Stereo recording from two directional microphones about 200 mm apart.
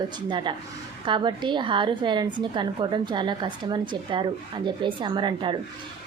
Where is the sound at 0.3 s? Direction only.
25° right (ahead or behind).